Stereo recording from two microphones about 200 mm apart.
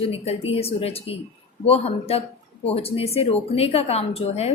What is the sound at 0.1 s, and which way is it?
A woman's voice, 30° left (ahead or behind).